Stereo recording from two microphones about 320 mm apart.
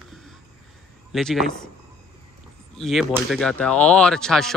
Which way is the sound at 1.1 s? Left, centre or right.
Centre.